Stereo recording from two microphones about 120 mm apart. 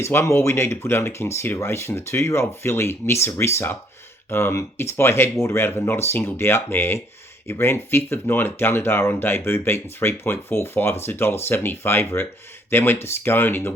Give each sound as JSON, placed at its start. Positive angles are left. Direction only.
{"t": 0.0, "sound": "speech", "side_deg": 20}